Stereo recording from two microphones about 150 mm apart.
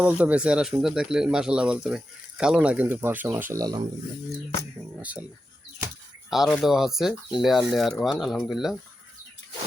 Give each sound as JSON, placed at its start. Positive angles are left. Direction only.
{"t": 0.0, "sound": "speech", "side_deg": -10}
{"t": 3.5, "sound": "speech", "side_deg": -25}
{"t": 6.3, "sound": "speech", "side_deg": 0}